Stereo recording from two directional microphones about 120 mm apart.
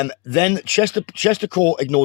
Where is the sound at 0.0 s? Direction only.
35° left (ahead or behind).